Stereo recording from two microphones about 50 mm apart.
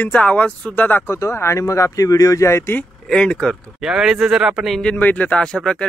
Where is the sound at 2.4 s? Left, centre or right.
Left.